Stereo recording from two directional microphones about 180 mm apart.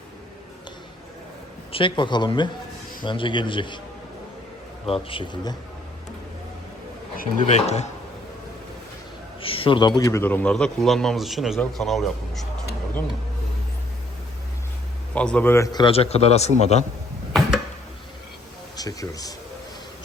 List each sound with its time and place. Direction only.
1.7 s speech: 25° left (ahead or behind)
4.9 s speech: 30° left (ahead or behind)
7.2 s a man's voice: 40° left (ahead or behind)
9.4 s a man's voice: 30° left (ahead or behind); by 12.5 s centre (ahead or behind)
15.1 s a man's voice: 5° left (ahead or behind); by 16.8 s 35° left (ahead or behind)
18.8 s speech: 20° left (ahead or behind)